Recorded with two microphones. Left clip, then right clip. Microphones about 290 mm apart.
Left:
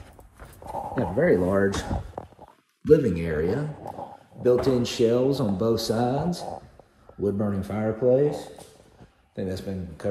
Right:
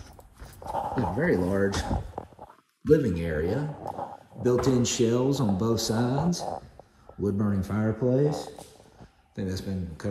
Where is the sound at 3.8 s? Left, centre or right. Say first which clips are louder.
Right 2 dB; left.